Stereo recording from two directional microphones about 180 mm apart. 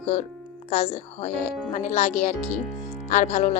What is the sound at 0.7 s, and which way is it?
Speech, 35° left (ahead or behind).